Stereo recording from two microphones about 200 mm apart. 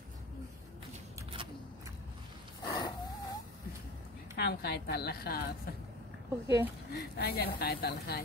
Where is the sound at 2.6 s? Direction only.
20° left (ahead or behind).